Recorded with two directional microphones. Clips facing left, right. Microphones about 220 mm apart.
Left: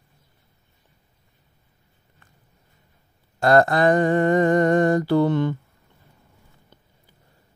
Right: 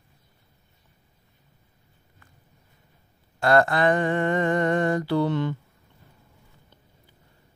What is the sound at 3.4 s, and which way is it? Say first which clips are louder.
Mantra: left 3 dB; 40° left (ahead or behind).